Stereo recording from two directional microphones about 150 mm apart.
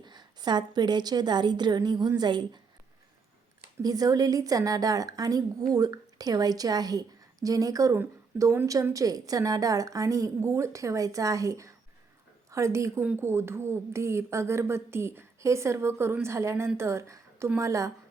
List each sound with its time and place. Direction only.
0.0 s a woman's voice: 30° right (ahead or behind)
3.8 s a woman's voice: 25° right (ahead or behind)